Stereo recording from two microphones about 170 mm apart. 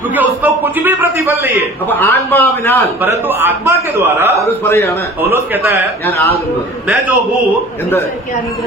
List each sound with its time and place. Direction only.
0.1 s a man's voice: 10° right (ahead or behind)
1.9 s a man's voice: 15° left (ahead or behind)
3.0 s a man's voice: 15° right (ahead or behind)
4.7 s a man's voice: 15° left (ahead or behind)
5.2 s a man's voice: 15° right (ahead or behind)
6.1 s a man's voice: 15° left (ahead or behind)